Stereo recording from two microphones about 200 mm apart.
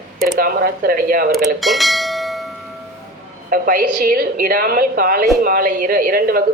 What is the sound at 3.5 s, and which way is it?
A woman's voice, 45° right (ahead or behind).